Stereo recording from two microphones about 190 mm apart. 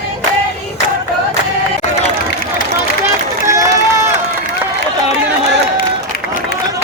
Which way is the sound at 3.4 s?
15° right (ahead or behind).